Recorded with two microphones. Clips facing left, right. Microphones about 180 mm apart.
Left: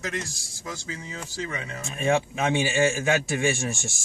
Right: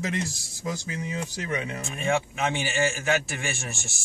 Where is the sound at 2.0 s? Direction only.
20° left (ahead or behind).